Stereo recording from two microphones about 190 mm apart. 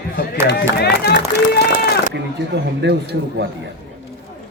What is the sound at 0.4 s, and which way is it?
Run, 60° left (ahead or behind).